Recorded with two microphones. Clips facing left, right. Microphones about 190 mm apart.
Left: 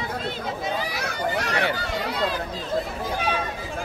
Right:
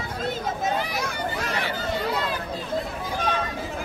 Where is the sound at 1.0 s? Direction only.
70° left (ahead or behind).